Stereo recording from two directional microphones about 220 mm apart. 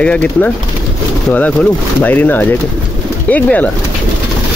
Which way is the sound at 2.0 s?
10° left (ahead or behind).